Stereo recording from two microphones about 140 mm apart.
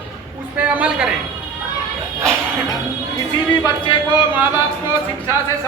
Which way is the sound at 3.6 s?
35° left (ahead or behind).